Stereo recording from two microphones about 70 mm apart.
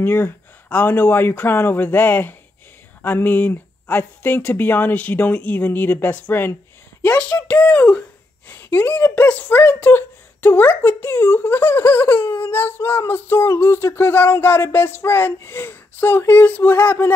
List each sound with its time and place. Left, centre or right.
0.0 s speech: left